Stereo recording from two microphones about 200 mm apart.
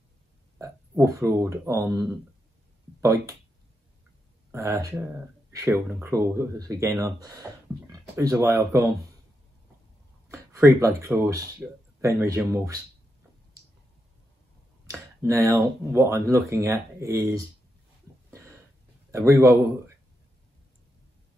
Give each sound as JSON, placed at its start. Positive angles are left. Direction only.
{"t": 0.6, "sound": "speech", "side_deg": -15}
{"t": 4.5, "sound": "speech", "side_deg": -15}
{"t": 10.3, "sound": "speech", "side_deg": -15}
{"t": 14.9, "sound": "speech", "side_deg": -15}
{"t": 19.1, "sound": "speech", "side_deg": -15}